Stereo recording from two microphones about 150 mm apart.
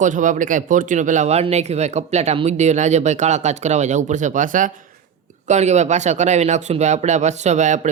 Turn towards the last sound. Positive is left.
turn(degrees=-55)  # may be behind; listen again after turning